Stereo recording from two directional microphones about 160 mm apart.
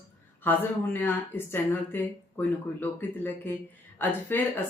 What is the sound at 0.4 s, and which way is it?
Speech, 10° left (ahead or behind).